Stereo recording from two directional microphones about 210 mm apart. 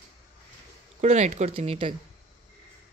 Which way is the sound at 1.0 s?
35° right (ahead or behind).